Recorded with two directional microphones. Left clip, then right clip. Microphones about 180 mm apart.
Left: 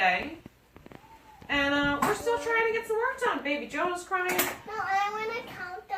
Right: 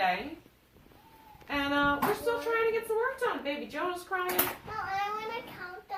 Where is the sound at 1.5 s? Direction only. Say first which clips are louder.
Left 2 dB; centre (ahead or behind).